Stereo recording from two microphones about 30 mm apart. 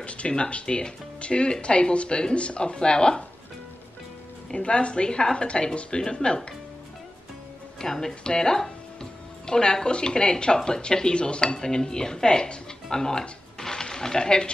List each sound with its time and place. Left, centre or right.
0.0 s speech: left
0.7 s speech: left
4.6 s speech: left
7.8 s speech: centre
8.1 s speech: left
13.6 s a sound: centre